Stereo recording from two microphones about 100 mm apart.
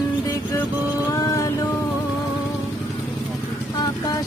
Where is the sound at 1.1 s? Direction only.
35° left (ahead or behind).